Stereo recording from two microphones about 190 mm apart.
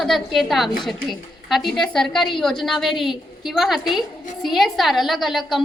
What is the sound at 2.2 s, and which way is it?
Speech, 25° left (ahead or behind).